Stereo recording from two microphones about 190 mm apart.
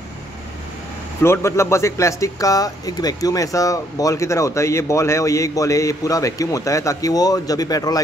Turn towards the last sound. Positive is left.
turn(degrees=20)  # may be behind; listen again after turning